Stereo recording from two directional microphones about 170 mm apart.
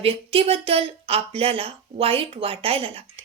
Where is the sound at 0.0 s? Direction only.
35° right (ahead or behind).